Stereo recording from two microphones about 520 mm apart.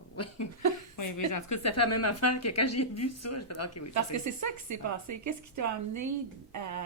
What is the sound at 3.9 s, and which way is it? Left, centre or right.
A woman's voice, right.